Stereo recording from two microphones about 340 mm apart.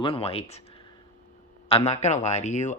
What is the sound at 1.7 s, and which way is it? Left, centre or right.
Speech, centre.